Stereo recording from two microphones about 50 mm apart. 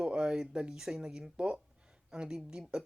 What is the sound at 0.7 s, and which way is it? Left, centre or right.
Speech, centre.